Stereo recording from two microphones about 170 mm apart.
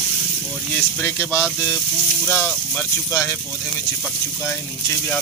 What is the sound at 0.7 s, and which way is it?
Speech, 10° left (ahead or behind).